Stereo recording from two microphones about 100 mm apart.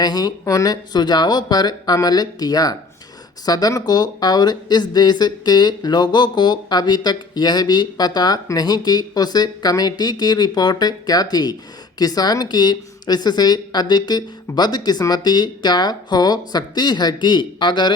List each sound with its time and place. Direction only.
0.0 s speech: 45° left (ahead or behind)